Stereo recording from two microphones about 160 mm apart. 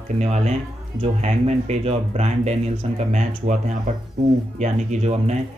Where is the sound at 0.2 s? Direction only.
45° right (ahead or behind).